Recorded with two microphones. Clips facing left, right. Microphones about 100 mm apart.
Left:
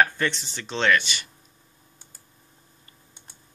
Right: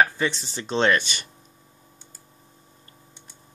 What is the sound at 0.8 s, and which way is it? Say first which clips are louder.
Speech: left 2 dB; 40° right (ahead or behind).